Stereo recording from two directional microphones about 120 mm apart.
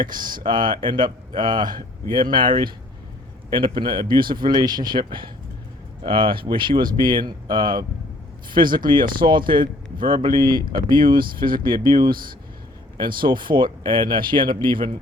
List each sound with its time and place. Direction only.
0.0 s speech: 40° right (ahead or behind)
13.0 s speech: 40° right (ahead or behind)